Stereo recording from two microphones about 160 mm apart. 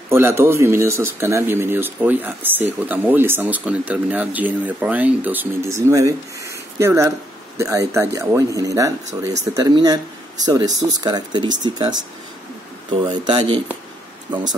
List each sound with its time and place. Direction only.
0.1 s speech: 15° right (ahead or behind)